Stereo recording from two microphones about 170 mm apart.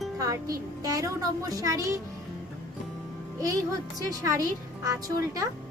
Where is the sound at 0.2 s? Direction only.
20° right (ahead or behind).